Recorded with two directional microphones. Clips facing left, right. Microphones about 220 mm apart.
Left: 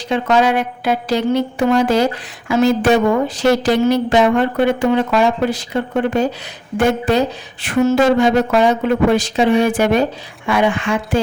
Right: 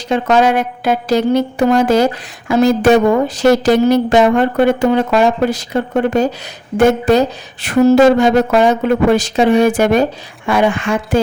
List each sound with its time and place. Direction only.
0.1 s a woman's voice: 45° right (ahead or behind)